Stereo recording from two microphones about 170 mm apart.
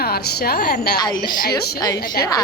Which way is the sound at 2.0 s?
55° left (ahead or behind).